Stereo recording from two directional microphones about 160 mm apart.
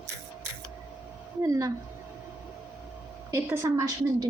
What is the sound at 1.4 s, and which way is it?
Speech, 20° right (ahead or behind).